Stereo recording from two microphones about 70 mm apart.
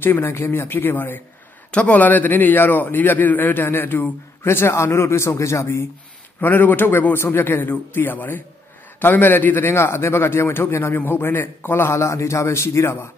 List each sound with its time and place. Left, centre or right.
0.0 s a man's voice: left
1.7 s a man's voice: centre; by 5.9 s left
6.4 s a man's voice: left